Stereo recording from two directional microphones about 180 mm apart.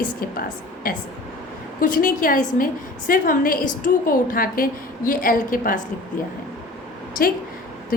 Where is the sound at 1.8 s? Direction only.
50° left (ahead or behind).